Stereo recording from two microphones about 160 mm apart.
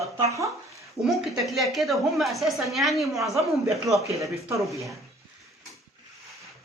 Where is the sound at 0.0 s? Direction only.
20° right (ahead or behind).